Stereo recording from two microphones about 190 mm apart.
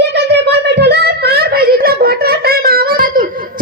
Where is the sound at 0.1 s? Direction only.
60° right (ahead or behind).